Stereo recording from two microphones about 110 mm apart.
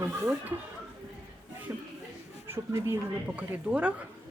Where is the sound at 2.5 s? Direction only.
25° right (ahead or behind).